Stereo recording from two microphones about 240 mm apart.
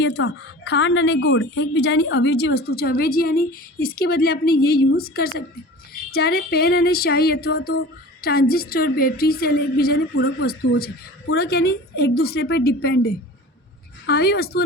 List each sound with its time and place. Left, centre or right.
0.0 s a woman's voice: left